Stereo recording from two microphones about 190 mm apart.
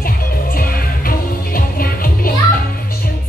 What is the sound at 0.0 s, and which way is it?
Music, 50° left (ahead or behind).